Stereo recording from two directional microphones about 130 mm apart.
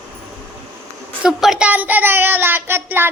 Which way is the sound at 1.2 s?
5° right (ahead or behind).